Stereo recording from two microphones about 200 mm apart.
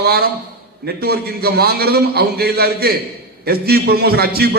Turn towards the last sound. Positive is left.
turn(degrees=-50)  # may be behind; listen again after turning